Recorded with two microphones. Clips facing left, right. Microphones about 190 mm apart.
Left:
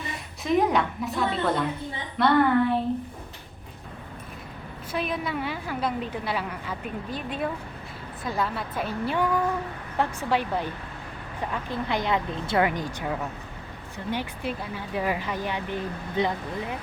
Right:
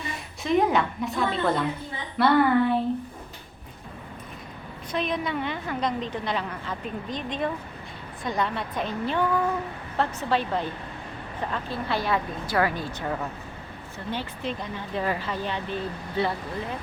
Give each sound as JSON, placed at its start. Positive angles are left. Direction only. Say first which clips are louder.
{"t": 0.4, "sound": "a woman's voice", "louder": "even", "side_deg": 0}
{"t": 4.9, "sound": "a woman's voice", "louder": "right 1 dB", "side_deg": 5}